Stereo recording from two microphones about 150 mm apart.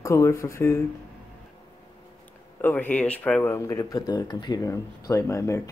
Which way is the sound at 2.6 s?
10° left (ahead or behind).